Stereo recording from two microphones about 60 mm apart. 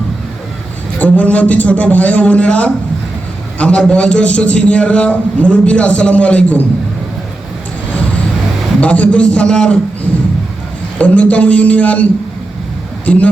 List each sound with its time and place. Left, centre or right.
0.9 s a man's voice: left
8.8 s a man's voice: left
10.9 s a man's voice: left
13.1 s a man's voice: left